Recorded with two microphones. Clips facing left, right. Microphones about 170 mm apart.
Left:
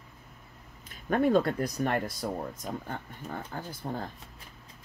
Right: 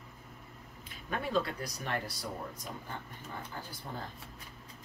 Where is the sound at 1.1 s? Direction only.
50° left (ahead or behind).